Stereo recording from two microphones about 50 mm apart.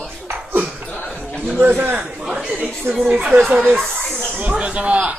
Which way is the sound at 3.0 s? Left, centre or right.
Right.